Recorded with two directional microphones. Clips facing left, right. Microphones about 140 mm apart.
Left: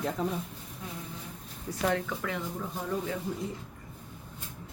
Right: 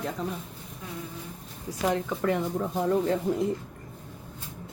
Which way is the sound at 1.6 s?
20° right (ahead or behind).